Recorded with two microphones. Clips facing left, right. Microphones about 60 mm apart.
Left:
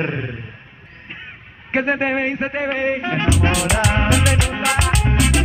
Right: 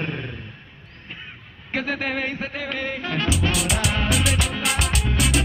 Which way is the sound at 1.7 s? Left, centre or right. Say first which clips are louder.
Left 7 dB; left.